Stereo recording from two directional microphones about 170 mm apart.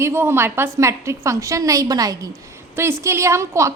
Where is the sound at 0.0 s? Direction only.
15° right (ahead or behind).